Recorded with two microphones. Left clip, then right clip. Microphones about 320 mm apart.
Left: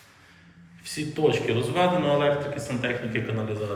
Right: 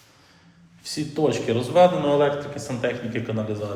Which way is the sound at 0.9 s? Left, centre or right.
Centre.